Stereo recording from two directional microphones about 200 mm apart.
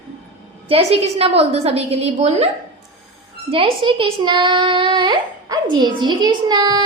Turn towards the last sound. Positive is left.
turn(degrees=-20)  # may be behind; listen again after turning